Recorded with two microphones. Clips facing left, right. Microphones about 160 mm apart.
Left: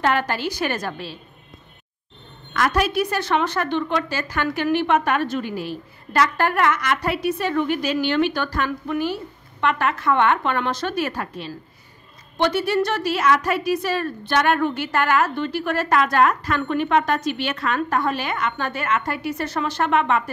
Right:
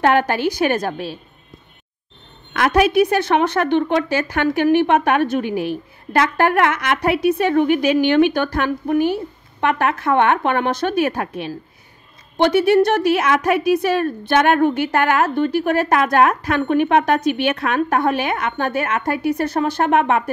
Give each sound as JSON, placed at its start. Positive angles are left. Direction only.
{"t": 0.0, "sound": "a woman's voice", "side_deg": -55}
{"t": 2.5, "sound": "a woman's voice", "side_deg": -60}